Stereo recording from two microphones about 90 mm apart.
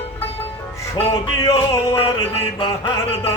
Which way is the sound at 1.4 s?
35° left (ahead or behind).